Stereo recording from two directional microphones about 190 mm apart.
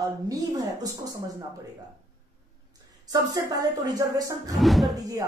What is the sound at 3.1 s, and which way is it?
Speech, 20° right (ahead or behind).